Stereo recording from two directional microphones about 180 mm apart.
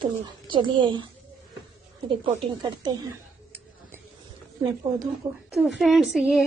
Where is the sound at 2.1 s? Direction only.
25° right (ahead or behind).